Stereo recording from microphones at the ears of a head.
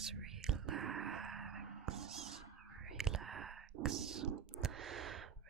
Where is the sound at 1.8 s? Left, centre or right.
Right.